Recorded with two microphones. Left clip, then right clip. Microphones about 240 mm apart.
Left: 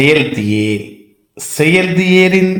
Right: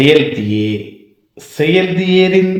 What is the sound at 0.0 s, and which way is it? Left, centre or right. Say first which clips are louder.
A man's voice: right 1 dB; left.